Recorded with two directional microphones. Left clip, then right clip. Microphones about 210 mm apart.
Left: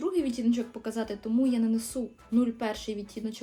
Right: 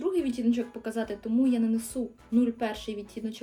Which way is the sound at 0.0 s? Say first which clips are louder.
Right 1 dB; 5° left (ahead or behind).